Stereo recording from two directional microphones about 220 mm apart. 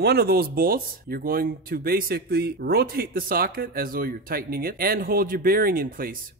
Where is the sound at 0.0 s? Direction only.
45° right (ahead or behind).